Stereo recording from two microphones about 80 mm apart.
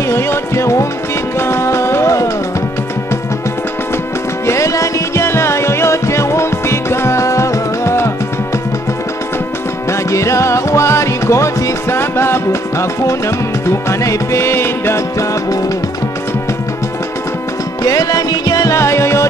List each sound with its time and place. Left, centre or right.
0.1 s music: left
4.5 s music: left
9.8 s music: left
17.8 s music: left